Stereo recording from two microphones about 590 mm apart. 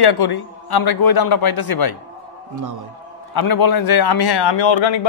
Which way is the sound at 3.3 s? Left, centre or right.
Left.